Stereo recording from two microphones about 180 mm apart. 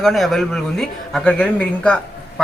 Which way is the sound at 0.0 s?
Centre (ahead or behind).